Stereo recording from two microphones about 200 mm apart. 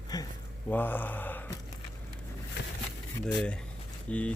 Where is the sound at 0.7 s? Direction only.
10° left (ahead or behind).